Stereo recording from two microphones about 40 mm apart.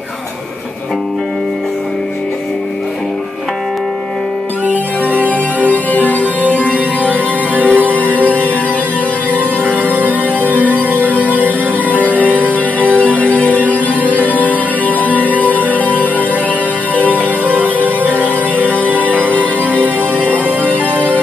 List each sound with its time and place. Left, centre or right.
4.6 s music: right
5.7 s music: left
7.1 s music: right
8.0 s music: left
9.4 s music: right
12.4 s music: left
18.0 s music: left